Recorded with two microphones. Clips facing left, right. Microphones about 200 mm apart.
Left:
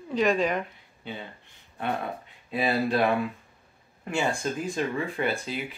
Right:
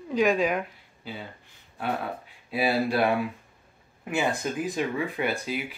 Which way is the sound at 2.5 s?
5° right (ahead or behind).